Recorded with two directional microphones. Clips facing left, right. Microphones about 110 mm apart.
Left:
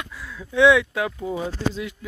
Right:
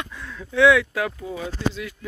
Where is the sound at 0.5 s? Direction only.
20° left (ahead or behind).